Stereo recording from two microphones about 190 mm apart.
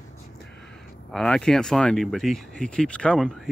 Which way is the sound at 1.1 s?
5° left (ahead or behind).